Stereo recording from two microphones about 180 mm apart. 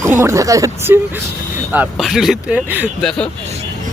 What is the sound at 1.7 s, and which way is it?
Speech, 5° right (ahead or behind).